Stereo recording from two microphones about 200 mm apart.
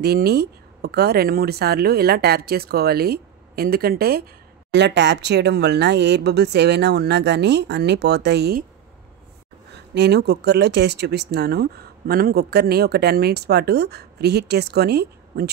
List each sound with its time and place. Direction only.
0.0 s speech: 55° right (ahead or behind)
4.7 s speech: 60° right (ahead or behind)
9.7 s speech: 55° right (ahead or behind)